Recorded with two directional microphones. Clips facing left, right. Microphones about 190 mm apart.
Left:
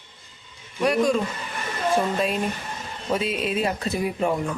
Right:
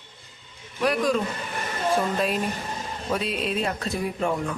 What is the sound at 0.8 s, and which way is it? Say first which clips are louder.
Speech: left 2 dB; centre (ahead or behind).